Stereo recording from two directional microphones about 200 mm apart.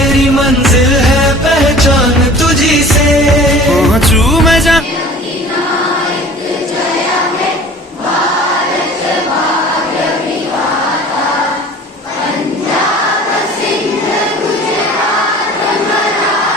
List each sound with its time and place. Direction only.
0.0 s music: centre (ahead or behind)